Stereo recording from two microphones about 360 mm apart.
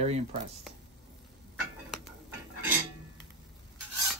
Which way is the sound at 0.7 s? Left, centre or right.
Centre.